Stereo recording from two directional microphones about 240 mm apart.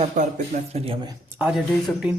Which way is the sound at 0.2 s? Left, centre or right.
Right.